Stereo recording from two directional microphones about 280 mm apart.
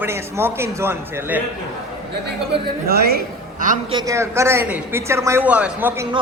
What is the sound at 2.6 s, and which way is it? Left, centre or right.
A woman's voice, right.